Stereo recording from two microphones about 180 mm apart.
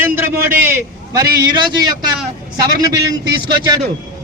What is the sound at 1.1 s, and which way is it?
A man's voice, 25° right (ahead or behind).